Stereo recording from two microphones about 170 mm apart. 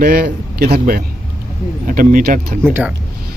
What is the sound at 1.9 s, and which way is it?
Speech, 55° right (ahead or behind).